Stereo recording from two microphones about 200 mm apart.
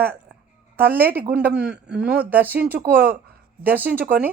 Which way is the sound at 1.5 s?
5° right (ahead or behind).